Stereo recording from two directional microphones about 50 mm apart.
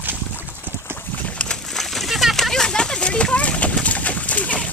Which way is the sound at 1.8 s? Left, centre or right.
Centre.